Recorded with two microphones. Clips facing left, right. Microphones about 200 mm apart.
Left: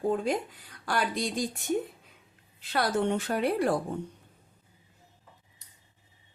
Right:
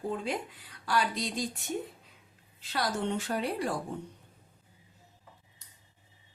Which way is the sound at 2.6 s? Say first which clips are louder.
Left 5 dB; 55° left (ahead or behind).